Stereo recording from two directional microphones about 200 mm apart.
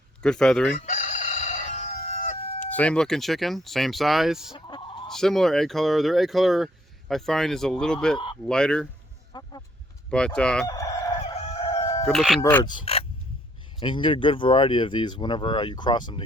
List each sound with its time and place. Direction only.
0.2 s speech: 5° left (ahead or behind)
0.7 s crowing: 35° left (ahead or behind)
2.6 s speech: 5° left (ahead or behind)
4.5 s fowl: 25° left (ahead or behind)
5.0 s speech: centre (ahead or behind)
9.3 s vehicle: 20° left (ahead or behind)
10.1 s speech: 5° left (ahead or behind)
10.7 s fowl: 15° left (ahead or behind)
11.3 s crowing: 25° left (ahead or behind)
12.0 s speech: centre (ahead or behind)
12.6 s speech: 25° left (ahead or behind)